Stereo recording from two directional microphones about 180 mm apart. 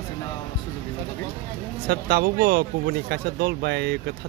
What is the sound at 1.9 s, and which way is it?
Speech, 60° right (ahead or behind).